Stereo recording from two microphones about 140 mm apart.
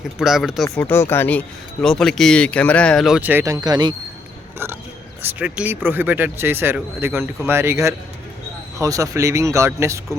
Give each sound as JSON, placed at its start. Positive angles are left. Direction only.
{"t": 0.2, "sound": "speech", "side_deg": -5}
{"t": 0.8, "sound": "speech", "side_deg": 15}
{"t": 3.2, "sound": "speech", "side_deg": -10}
{"t": 3.4, "sound": "speech", "side_deg": -25}
{"t": 4.5, "sound": "a sound", "side_deg": -15}
{"t": 5.2, "sound": "speech", "side_deg": -15}